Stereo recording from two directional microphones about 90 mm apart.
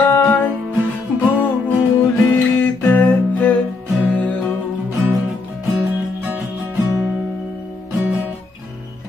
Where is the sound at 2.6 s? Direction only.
20° left (ahead or behind).